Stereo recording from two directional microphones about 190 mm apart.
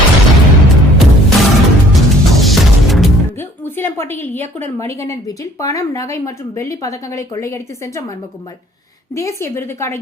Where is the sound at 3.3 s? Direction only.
10° left (ahead or behind).